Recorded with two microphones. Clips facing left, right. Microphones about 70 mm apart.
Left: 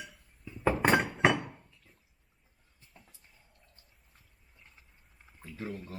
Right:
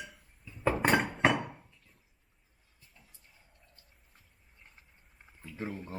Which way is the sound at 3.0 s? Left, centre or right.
Left.